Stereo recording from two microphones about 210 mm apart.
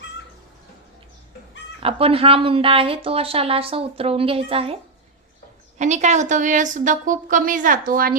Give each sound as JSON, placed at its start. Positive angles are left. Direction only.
{"t": 1.8, "sound": "speech", "side_deg": -25}
{"t": 5.8, "sound": "a woman's voice", "side_deg": -35}